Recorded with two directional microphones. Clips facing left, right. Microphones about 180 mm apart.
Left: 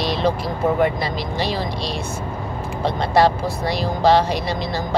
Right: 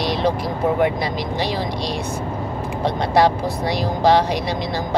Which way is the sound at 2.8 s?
15° right (ahead or behind).